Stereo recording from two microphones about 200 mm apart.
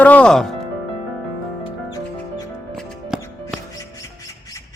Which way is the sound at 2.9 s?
5° right (ahead or behind).